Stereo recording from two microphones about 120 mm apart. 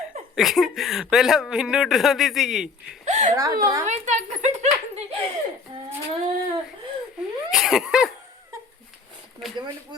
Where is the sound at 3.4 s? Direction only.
30° right (ahead or behind).